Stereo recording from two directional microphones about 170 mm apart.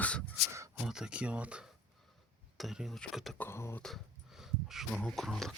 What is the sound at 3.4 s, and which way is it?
Speech, 15° left (ahead or behind).